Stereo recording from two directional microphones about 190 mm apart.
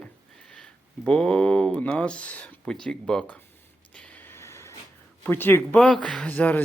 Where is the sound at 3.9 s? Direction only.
5° left (ahead or behind).